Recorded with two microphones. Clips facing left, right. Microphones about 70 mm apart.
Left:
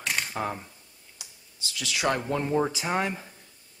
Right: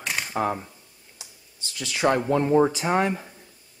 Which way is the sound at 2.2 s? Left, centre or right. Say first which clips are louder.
Right 6 dB; centre.